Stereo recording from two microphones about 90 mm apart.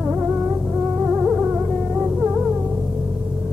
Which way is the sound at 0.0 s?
20° right (ahead or behind).